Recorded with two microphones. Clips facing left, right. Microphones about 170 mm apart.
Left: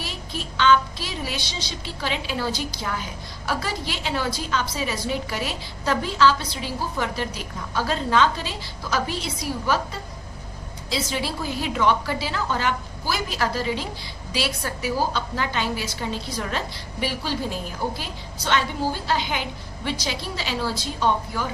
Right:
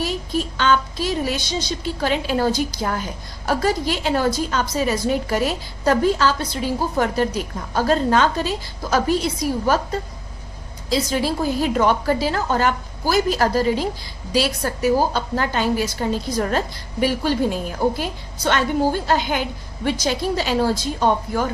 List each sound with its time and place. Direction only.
0.0 s a woman's voice: 45° right (ahead or behind)